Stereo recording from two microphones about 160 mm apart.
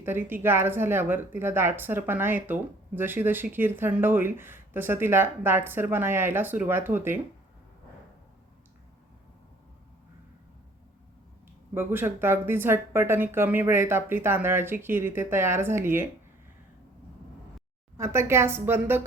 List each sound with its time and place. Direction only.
0.0 s a woman's voice: 15° right (ahead or behind)
11.7 s a woman's voice: 15° right (ahead or behind)
17.9 s a woman's voice: 15° right (ahead or behind)